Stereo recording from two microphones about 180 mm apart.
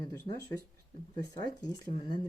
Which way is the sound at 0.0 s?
20° left (ahead or behind).